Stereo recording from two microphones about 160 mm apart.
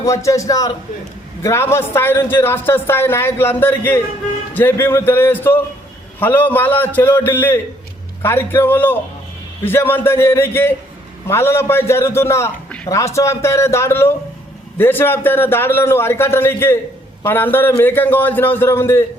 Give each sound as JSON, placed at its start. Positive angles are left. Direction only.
{"t": 0.0, "sound": "a man's voice", "side_deg": 20}